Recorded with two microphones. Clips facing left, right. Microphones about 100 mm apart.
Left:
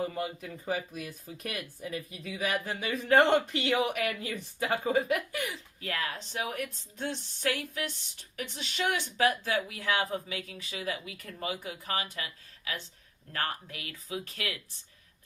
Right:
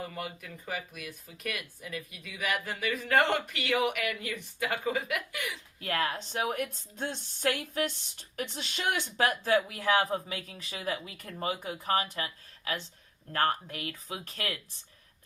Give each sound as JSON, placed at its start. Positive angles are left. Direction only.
{"t": 0.0, "sound": "speech", "side_deg": 30}
{"t": 5.8, "sound": "speech", "side_deg": -40}